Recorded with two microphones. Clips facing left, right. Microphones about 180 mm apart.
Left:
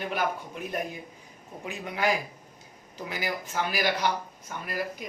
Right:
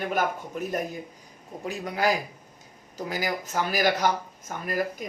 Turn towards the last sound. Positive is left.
turn(degrees=-45)  # may be behind; listen again after turning